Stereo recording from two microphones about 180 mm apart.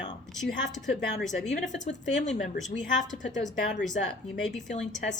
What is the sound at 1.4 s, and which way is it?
A woman's voice, 40° left (ahead or behind).